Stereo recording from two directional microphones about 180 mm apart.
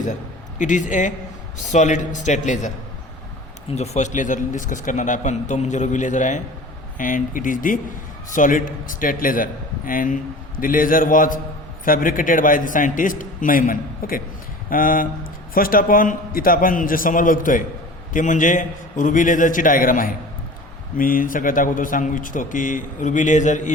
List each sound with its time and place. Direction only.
0.6 s a man's voice: 45° left (ahead or behind)